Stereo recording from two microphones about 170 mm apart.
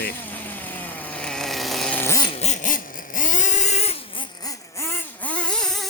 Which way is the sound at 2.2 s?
35° left (ahead or behind).